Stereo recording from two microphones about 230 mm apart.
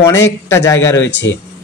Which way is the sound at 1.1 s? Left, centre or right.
Left.